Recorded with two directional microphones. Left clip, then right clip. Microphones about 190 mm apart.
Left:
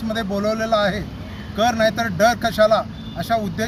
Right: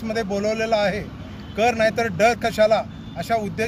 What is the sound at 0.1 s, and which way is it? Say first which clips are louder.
Speech: left 1 dB; 25° right (ahead or behind).